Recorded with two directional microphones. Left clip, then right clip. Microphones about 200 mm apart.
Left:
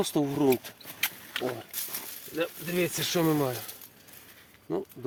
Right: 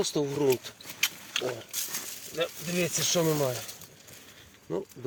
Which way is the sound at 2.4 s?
25° left (ahead or behind).